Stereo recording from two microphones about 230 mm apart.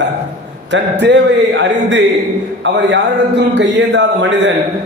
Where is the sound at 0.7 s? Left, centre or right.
Right.